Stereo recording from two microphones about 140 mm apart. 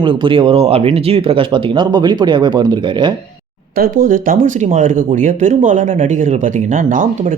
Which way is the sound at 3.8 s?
85° right.